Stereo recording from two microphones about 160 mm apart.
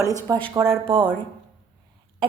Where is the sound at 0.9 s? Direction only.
30° right (ahead or behind).